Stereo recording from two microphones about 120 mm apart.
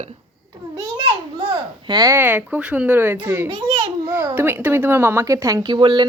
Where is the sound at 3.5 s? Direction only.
55° right (ahead or behind).